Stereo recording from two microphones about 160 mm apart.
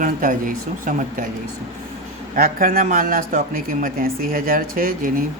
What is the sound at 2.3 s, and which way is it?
Speech, 65° right (ahead or behind).